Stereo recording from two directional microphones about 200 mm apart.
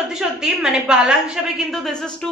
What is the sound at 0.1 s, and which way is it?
A woman's voice, centre (ahead or behind).